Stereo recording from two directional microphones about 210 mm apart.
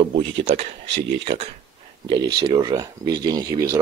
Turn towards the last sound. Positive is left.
turn(degrees=-15)  # may be behind; listen again after turning